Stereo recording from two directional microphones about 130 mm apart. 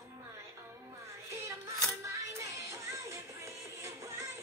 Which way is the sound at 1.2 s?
20° right (ahead or behind).